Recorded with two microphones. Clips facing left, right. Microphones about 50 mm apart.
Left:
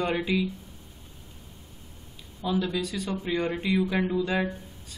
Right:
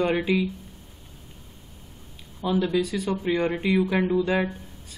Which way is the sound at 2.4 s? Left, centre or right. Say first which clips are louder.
Right 4 dB; right.